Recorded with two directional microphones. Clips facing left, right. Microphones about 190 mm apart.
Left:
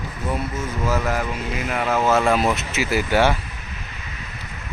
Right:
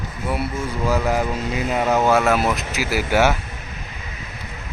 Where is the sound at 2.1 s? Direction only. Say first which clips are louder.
Even; 5° right (ahead or behind).